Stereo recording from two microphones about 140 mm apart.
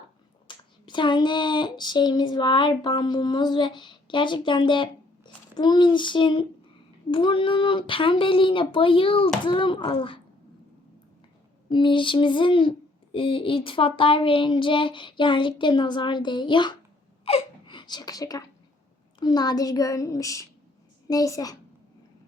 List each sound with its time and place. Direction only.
0.4 s speech: 35° left (ahead or behind)
11.7 s speech: 35° left (ahead or behind)
17.2 s a sound: 40° left (ahead or behind)
19.2 s a woman's voice: 30° left (ahead or behind)